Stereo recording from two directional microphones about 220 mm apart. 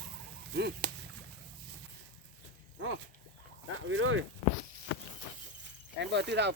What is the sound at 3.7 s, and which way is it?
Speech, 65° right (ahead or behind).